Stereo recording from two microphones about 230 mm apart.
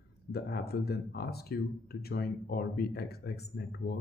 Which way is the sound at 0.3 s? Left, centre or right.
Left.